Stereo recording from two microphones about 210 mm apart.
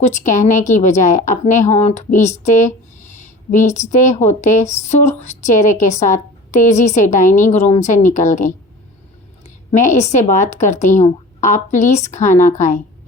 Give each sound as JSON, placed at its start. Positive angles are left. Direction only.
{"t": 0.3, "sound": "speech", "side_deg": 35}
{"t": 9.7, "sound": "speech", "side_deg": 35}